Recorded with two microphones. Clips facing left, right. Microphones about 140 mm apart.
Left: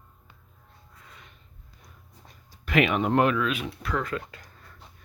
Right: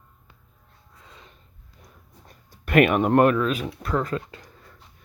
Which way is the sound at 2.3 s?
55° right (ahead or behind).